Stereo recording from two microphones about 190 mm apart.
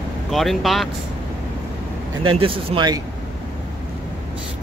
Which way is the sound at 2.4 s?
30° right (ahead or behind).